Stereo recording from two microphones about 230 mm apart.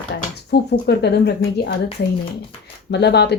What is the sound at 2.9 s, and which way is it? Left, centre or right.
Speech, left.